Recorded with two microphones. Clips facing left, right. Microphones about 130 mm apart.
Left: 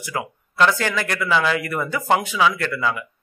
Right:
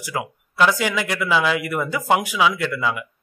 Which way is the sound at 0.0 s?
15° right (ahead or behind).